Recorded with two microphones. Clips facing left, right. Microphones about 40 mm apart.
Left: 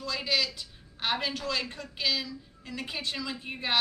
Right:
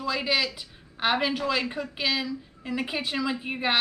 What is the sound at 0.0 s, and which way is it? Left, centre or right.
Speech, centre.